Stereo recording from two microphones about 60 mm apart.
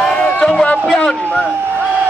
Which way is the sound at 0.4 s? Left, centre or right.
Centre.